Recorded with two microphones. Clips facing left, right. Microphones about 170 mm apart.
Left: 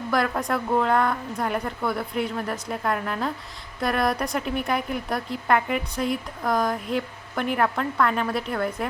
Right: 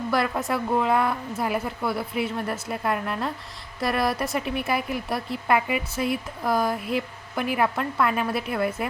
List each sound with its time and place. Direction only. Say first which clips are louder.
0.1 s speech: left 1 dB; 5° right (ahead or behind)